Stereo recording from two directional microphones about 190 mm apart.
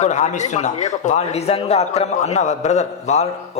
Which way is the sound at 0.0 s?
40° left (ahead or behind).